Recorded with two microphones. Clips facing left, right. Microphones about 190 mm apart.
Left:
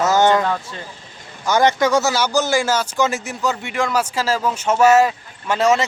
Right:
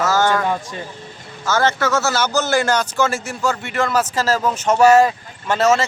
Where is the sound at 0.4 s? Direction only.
15° right (ahead or behind).